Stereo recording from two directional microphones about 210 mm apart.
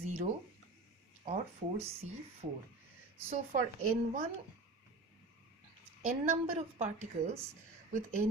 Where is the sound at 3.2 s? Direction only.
40° right (ahead or behind).